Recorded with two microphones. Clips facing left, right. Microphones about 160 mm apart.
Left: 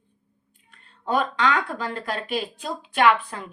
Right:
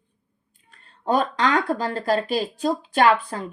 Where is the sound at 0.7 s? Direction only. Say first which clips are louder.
Right 3 dB; 40° right (ahead or behind).